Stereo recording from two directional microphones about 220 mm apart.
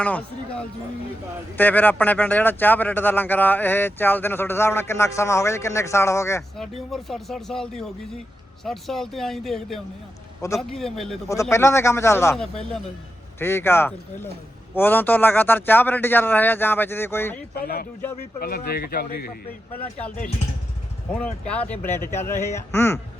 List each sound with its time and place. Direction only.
0.0 s a man's voice: 5° left (ahead or behind)
6.6 s speech: centre (ahead or behind)
11.5 s a man's voice: 10° left (ahead or behind)
13.4 s a man's voice: 10° left (ahead or behind)
17.5 s speech: 45° left (ahead or behind)
19.7 s speech: 5° left (ahead or behind)
21.4 s a man's voice: 5° left (ahead or behind)